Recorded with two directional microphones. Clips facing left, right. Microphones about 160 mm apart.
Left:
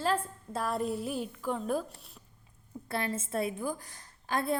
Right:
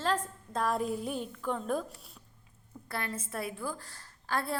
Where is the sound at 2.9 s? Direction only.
25° left (ahead or behind).